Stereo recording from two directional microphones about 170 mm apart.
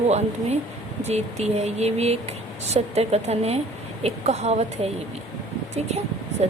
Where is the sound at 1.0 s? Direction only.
40° right (ahead or behind).